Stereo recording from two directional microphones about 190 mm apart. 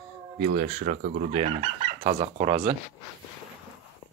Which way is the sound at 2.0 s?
30° right (ahead or behind).